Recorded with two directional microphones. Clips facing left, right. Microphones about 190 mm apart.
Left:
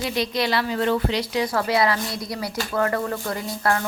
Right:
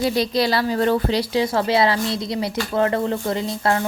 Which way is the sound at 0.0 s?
35° right (ahead or behind).